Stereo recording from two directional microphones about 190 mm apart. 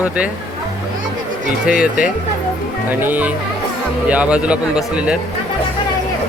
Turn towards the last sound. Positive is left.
turn(degrees=-5)  # may be behind; listen again after turning